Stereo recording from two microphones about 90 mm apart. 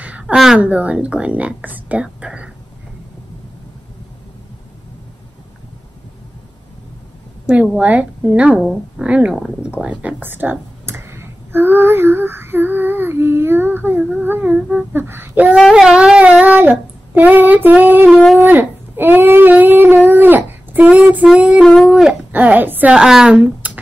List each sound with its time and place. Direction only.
0.0 s a sound: 15° right (ahead or behind)
0.6 s speech: 15° right (ahead or behind)
7.7 s speech: 10° right (ahead or behind)
9.1 s speech: 15° right (ahead or behind)
15.7 s speech: 10° right (ahead or behind)
22.3 s speech: 20° right (ahead or behind)
22.9 s speech: 5° right (ahead or behind)